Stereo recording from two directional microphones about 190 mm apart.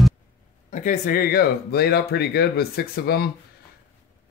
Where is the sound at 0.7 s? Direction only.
40° left (ahead or behind).